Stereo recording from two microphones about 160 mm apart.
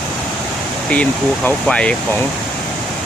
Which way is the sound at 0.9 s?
10° left (ahead or behind).